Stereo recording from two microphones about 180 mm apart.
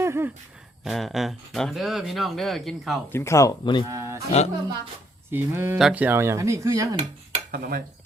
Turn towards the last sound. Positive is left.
turn(degrees=-55)  # may be behind; listen again after turning